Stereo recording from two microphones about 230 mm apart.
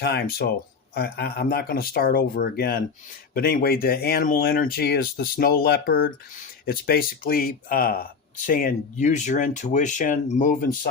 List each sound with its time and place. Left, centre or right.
0.0 s speech: left